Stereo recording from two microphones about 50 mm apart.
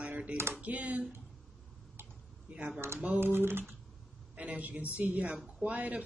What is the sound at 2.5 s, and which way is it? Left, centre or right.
Speech, right.